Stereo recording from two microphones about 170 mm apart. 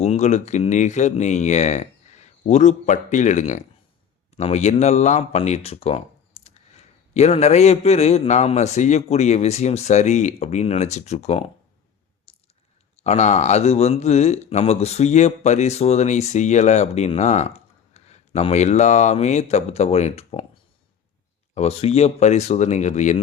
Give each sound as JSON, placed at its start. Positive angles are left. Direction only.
{"t": 0.0, "sound": "speech", "side_deg": 40}
{"t": 13.0, "sound": "speech", "side_deg": 40}
{"t": 21.5, "sound": "speech", "side_deg": 35}